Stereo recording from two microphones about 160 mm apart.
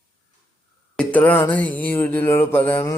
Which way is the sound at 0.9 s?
10° left (ahead or behind).